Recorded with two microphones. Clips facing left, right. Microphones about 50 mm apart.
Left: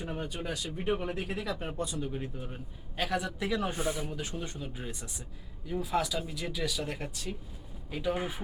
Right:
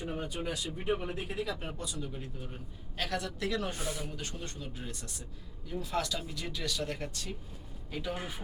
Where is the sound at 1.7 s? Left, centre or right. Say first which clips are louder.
Left 5 dB; left.